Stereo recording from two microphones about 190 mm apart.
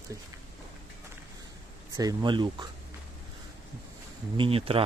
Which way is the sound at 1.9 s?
20° right (ahead or behind).